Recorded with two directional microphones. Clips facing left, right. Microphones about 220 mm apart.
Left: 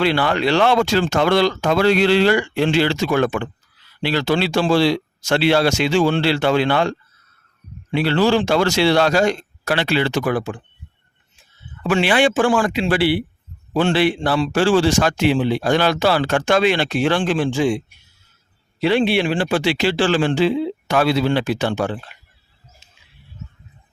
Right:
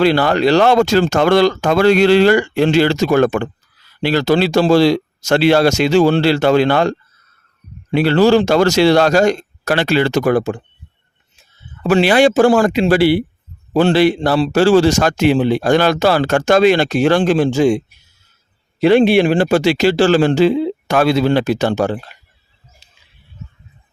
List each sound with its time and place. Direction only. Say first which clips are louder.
0.0 s a man's voice: right 5 dB; 40° right (ahead or behind)
11.8 s a man's voice: right 5 dB; 40° right (ahead or behind)
22.8 s a sound: left 1 dB; 35° right (ahead or behind)